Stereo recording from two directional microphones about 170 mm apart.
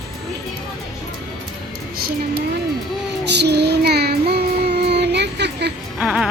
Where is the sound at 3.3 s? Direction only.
80° right.